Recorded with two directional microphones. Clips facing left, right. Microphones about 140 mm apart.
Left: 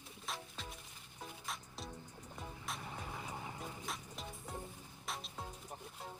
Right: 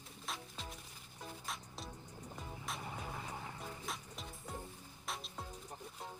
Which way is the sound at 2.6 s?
Centre (ahead or behind).